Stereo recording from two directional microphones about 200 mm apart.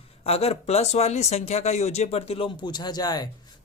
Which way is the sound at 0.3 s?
30° left (ahead or behind).